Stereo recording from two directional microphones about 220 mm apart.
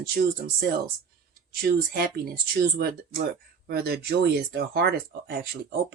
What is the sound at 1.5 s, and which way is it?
Speech, 45° right (ahead or behind).